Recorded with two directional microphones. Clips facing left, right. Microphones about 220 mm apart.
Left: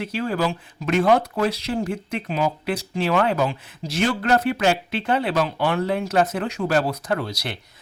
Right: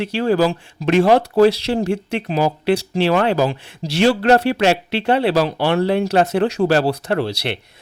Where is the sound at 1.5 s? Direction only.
80° right.